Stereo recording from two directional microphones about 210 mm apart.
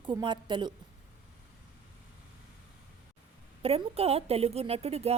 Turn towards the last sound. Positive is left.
turn(degrees=-30)  # may be behind; listen again after turning